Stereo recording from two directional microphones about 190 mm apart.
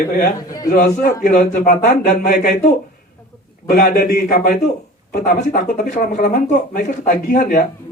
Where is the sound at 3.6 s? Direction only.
50° left (ahead or behind).